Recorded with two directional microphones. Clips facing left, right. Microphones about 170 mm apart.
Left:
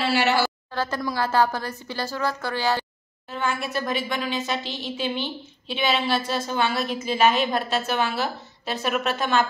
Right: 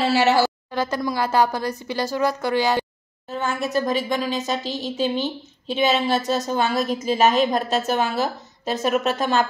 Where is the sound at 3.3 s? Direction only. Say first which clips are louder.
Right 2 dB; 40° right (ahead or behind).